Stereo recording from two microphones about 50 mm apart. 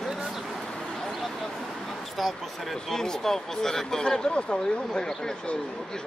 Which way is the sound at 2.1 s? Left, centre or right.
Centre.